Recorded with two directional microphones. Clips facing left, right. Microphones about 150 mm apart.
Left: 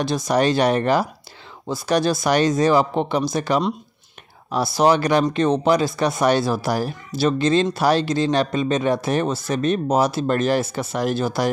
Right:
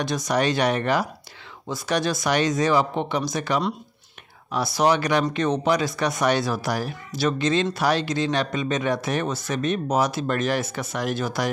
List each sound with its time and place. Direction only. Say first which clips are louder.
0.0 s speech: left 4 dB; 30° left (ahead or behind)